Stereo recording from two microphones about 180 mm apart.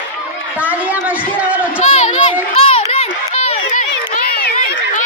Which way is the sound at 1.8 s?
40° left (ahead or behind).